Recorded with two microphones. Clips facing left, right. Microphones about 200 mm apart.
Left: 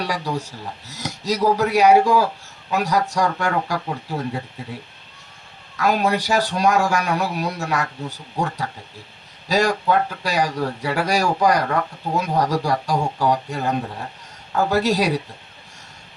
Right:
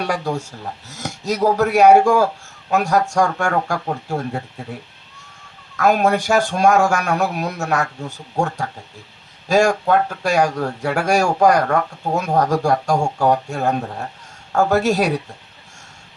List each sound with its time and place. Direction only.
0.0 s speech: 50° right (ahead or behind)
5.7 s speech: 45° right (ahead or behind)
9.5 s speech: 50° right (ahead or behind)